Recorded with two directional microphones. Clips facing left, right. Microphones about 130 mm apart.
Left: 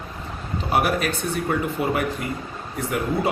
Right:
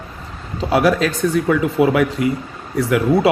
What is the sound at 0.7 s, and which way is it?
Speech, 90° right.